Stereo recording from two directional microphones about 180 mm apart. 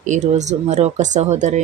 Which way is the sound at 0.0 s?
40° right (ahead or behind).